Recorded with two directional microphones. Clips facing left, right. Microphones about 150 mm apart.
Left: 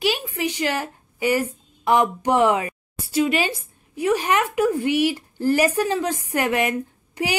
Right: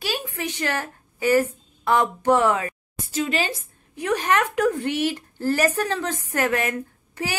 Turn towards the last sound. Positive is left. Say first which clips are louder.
# left 4 dB
turn(degrees=15)  # may be behind; listen again after turning